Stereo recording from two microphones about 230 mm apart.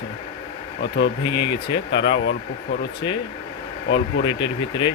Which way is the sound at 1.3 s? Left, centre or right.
Centre.